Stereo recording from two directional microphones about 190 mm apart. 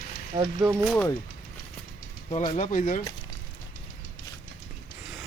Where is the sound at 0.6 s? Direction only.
10° right (ahead or behind).